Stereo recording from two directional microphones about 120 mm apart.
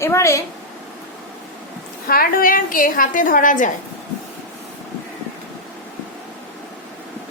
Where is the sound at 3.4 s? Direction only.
90° left.